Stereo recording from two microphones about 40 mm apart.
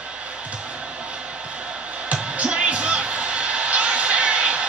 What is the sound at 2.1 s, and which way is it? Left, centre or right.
Music, right.